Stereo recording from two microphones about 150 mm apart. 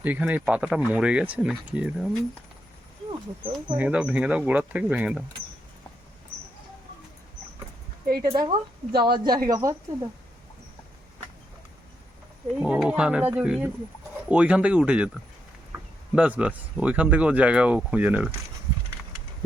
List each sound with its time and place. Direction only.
0.0 s speech: 10° right (ahead or behind)
3.1 s speech: 30° right (ahead or behind)
3.8 s speech: 5° right (ahead or behind)
8.0 s speech: 90° right
8.4 s speech: 30° right (ahead or behind)
9.5 s speech: 20° right (ahead or behind)
12.5 s speech: 5° right (ahead or behind)
16.1 s speech: 10° right (ahead or behind)